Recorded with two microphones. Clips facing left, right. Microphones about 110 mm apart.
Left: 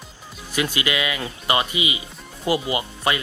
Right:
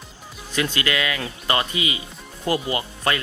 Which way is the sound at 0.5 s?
15° left (ahead or behind).